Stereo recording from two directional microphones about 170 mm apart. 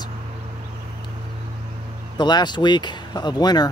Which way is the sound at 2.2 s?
25° left (ahead or behind).